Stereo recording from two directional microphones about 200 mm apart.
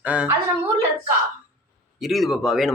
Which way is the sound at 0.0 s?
5° right (ahead or behind).